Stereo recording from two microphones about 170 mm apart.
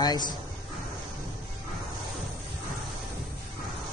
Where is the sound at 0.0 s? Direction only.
25° left (ahead or behind).